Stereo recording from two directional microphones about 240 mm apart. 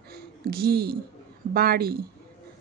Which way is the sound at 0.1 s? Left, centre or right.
Right.